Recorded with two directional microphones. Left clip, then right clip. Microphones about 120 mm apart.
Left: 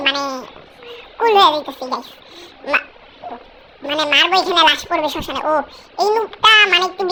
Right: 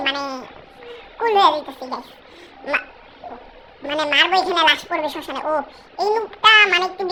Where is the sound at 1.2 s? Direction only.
25° left (ahead or behind).